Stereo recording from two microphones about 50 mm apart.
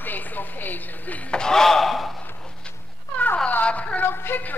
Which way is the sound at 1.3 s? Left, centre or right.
Centre.